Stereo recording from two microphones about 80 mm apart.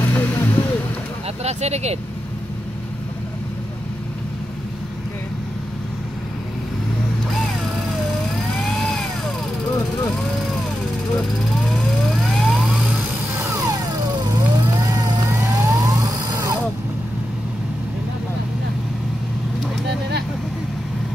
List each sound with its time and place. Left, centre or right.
0.0 s vehicle: left
8.6 s vehicle: centre
11.7 s vehicle: centre
13.4 s music: right
14.6 s vehicle: right
15.2 s vehicle: right